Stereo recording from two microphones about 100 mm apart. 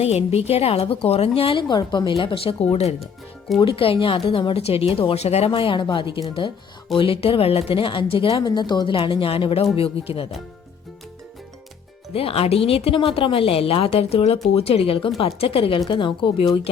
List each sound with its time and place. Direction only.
0.0 s a woman's voice: 90° left
1.4 s speech: 70° left (ahead or behind)
1.6 s speech: 50° left (ahead or behind); by 2.9 s 90° left
3.6 s speech: 65° left (ahead or behind); by 5.5 s 90° left
5.5 s speech: 55° left (ahead or behind)
8.3 s speech: 45° left (ahead or behind)
9.0 s speech: 60° left (ahead or behind)
12.1 s speech: 75° left (ahead or behind)
14.5 s speech: 80° left
15.9 s speech: 55° left (ahead or behind)